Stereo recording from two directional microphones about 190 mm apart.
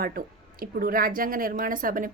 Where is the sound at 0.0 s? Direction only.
50° right (ahead or behind).